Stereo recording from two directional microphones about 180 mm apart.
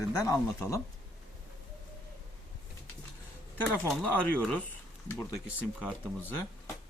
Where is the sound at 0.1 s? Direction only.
15° left (ahead or behind).